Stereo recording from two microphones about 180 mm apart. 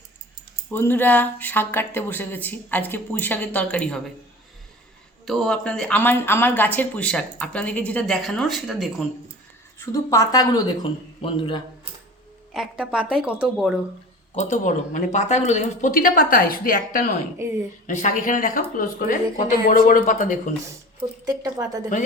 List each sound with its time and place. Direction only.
0.7 s speech: 10° left (ahead or behind)
5.2 s speech: centre (ahead or behind)
9.7 s speech: 15° left (ahead or behind)
12.5 s speech: 5° right (ahead or behind)
14.3 s speech: 45° left (ahead or behind)
21.2 s speech: 20° right (ahead or behind)